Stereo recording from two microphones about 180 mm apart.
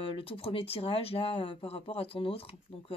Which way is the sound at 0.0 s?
30° left (ahead or behind).